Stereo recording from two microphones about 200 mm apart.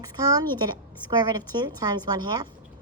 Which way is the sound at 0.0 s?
20° right (ahead or behind).